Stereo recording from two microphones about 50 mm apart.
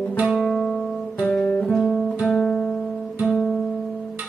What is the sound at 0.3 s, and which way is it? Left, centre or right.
Guitar, centre.